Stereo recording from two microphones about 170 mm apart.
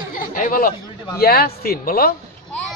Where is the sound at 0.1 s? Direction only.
55° left (ahead or behind).